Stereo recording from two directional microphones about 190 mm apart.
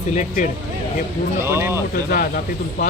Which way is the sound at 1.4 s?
15° right (ahead or behind).